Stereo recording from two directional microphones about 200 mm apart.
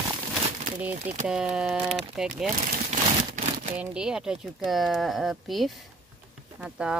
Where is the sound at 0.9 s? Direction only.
40° right (ahead or behind).